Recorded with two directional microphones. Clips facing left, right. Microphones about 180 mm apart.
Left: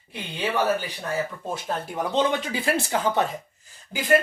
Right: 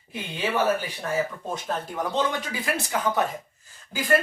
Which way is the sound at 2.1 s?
25° left (ahead or behind).